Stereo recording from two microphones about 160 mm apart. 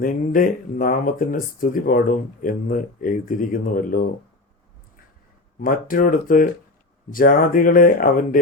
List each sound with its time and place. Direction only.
0.0 s speech: 55° left (ahead or behind)
5.5 s speech: 60° left (ahead or behind)